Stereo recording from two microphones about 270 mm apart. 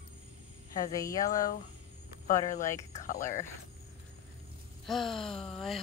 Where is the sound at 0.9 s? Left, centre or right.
Centre.